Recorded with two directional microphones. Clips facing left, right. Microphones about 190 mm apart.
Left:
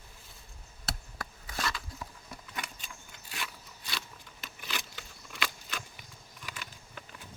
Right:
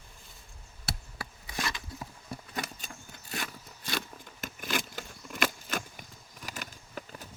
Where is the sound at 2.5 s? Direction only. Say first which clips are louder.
Right 3 dB; 40° right (ahead or behind).